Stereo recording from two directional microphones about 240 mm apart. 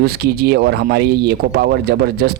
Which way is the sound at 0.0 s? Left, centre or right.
Right.